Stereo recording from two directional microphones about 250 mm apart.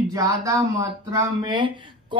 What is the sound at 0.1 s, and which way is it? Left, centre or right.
Speech, centre.